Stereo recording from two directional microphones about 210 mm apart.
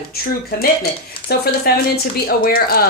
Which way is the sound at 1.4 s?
45° left (ahead or behind).